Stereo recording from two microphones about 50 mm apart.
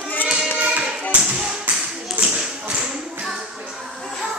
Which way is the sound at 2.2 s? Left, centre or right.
Right.